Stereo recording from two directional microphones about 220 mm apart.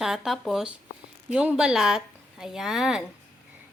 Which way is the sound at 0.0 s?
Centre (ahead or behind).